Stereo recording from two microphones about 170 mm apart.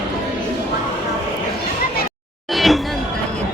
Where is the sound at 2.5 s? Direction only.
Centre (ahead or behind).